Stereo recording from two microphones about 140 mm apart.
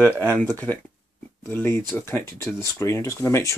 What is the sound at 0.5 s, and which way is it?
Speech, 15° left (ahead or behind).